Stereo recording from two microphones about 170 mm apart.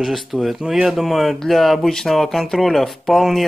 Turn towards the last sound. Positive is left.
turn(degrees=0)  # may be behind; listen again after turning